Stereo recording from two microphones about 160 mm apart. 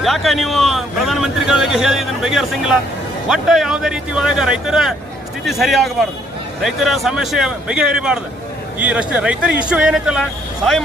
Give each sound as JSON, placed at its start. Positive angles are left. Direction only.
{"t": 0.0, "sound": "a man's voice", "side_deg": 0}